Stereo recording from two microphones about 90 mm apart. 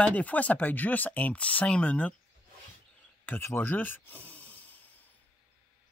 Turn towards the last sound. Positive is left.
turn(degrees=20)  # may be behind; listen again after turning